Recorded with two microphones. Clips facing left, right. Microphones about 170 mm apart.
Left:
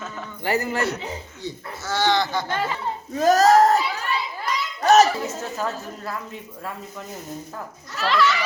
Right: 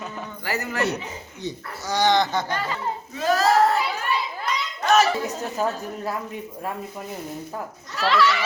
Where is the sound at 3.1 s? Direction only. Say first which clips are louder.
Left 5 dB; 45° left (ahead or behind).